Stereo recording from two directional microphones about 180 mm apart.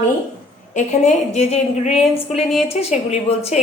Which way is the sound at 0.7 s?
40° left (ahead or behind).